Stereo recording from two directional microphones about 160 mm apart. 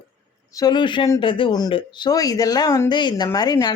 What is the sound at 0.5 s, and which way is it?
Speech, 25° left (ahead or behind).